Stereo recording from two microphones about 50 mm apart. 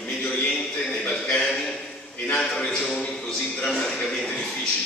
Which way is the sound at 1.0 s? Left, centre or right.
Centre.